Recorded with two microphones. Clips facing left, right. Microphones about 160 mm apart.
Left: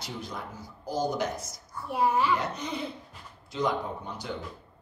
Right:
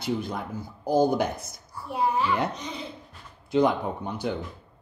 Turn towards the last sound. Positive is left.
turn(degrees=-60)  # may be behind; listen again after turning